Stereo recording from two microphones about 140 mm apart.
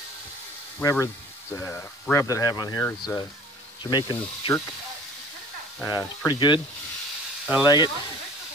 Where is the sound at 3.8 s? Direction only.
30° left (ahead or behind).